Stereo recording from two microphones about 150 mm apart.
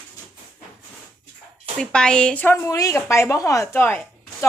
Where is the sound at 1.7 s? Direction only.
5° left (ahead or behind).